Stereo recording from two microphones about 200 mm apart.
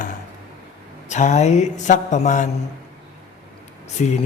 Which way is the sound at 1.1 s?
35° left (ahead or behind).